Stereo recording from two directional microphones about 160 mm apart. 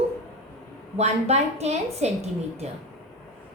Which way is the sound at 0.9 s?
45° right (ahead or behind).